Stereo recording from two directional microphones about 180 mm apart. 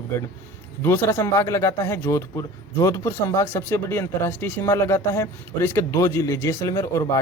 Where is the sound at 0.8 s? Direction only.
15° left (ahead or behind).